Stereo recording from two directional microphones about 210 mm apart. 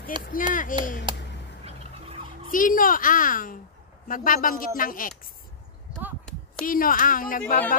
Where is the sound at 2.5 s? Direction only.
40° left (ahead or behind).